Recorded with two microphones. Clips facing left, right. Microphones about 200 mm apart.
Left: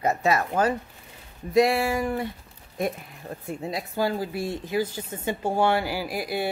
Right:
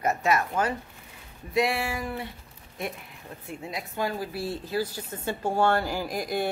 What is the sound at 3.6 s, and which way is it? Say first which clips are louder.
Speech: left 4 dB; 35° left (ahead or behind).